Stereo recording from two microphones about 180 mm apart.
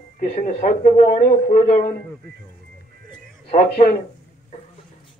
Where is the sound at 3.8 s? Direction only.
35° left (ahead or behind).